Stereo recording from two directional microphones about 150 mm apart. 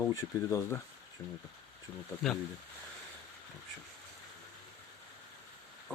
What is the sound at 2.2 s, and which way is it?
Speech, centre (ahead or behind).